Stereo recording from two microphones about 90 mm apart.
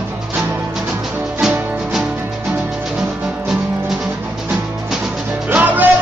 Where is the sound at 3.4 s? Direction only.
20° right (ahead or behind).